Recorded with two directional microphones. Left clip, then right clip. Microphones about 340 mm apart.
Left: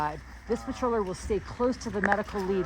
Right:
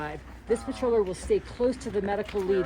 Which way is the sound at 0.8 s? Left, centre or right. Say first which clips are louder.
Right 3 dB; left.